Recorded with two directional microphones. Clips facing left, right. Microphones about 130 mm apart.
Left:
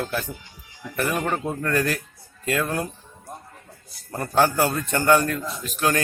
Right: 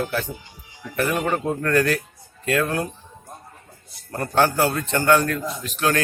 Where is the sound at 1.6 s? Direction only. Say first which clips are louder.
Right 4 dB; 5° left (ahead or behind).